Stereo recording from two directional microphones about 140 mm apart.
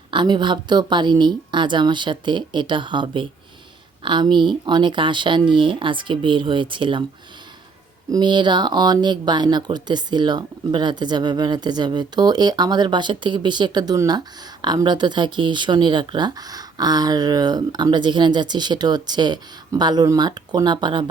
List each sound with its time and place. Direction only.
0.1 s speech: 35° right (ahead or behind)
8.1 s speech: 35° right (ahead or behind)